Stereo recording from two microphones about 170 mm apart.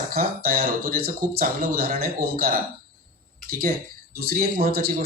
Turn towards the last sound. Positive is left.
turn(degrees=-60)  # may be behind; listen again after turning